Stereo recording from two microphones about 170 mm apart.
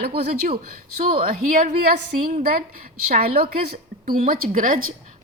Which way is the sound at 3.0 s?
60° right (ahead or behind).